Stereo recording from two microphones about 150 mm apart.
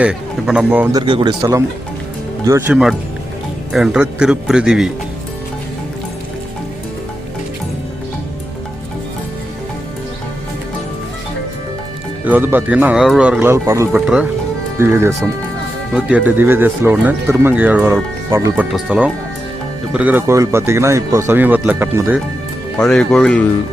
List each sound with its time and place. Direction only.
0.0 s speech: 5° right (ahead or behind)
0.9 s speech: 30° right (ahead or behind)
3.7 s speech: 5° right (ahead or behind)
12.2 s speech: 10° right (ahead or behind)
22.8 s speech: 5° left (ahead or behind)